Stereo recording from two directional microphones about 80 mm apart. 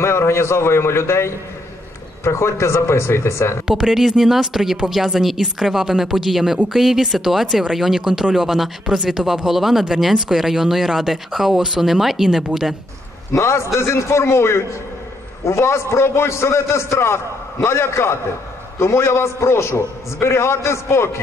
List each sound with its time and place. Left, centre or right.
0.0 s a man's voice: left
3.6 s speech: centre
13.3 s a man's voice: left